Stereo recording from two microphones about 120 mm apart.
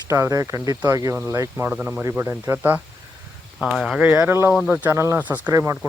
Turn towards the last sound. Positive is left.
turn(degrees=-25)  # may be behind; listen again after turning